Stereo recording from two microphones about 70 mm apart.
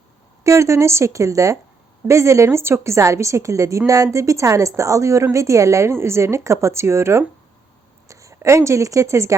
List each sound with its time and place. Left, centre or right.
0.4 s a woman's voice: right